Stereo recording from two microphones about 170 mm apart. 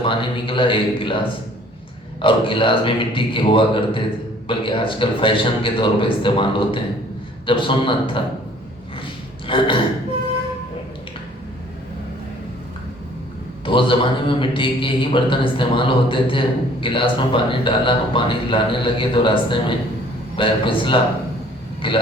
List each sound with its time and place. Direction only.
0.0 s a man's voice: 30° left (ahead or behind)
2.2 s a man's voice: 30° left (ahead or behind)
9.5 s a man's voice: 30° left (ahead or behind)
13.7 s a man's voice: 30° left (ahead or behind)